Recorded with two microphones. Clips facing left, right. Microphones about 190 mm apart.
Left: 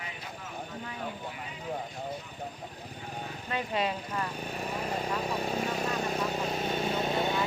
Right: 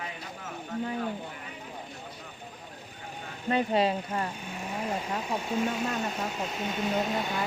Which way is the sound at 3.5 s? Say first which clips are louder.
Right 6 dB; 30° right (ahead or behind).